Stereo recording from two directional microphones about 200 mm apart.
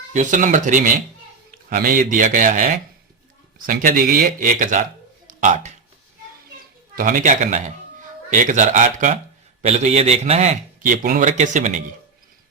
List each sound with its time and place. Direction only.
0.1 s a man's voice: 40° right (ahead or behind)
6.9 s a man's voice: 40° right (ahead or behind)